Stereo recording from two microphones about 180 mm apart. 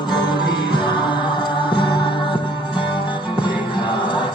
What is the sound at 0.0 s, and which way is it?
Music, 25° left (ahead or behind).